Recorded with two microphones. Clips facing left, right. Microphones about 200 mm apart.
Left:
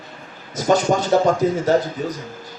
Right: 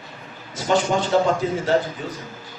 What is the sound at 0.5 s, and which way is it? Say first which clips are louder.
Speech: left 3 dB; 40° left (ahead or behind).